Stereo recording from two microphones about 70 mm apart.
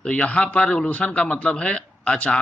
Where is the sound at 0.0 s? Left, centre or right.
Centre.